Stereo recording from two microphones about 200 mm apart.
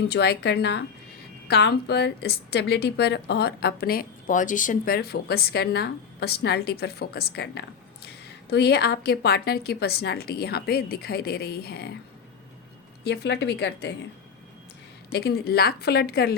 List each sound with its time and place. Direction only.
0.1 s a woman's voice: 55° left (ahead or behind)
13.1 s a woman's voice: 60° left (ahead or behind)
15.1 s a woman's voice: 50° left (ahead or behind)